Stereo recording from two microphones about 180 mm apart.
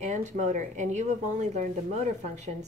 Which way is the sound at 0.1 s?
40° right (ahead or behind).